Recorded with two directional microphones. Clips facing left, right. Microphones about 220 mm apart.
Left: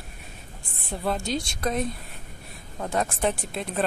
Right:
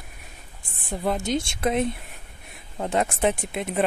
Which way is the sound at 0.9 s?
15° right (ahead or behind).